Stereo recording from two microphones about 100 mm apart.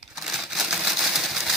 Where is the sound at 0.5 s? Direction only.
5° right (ahead or behind).